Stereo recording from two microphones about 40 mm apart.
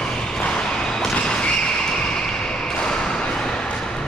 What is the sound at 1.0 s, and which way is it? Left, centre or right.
Vehicle, left.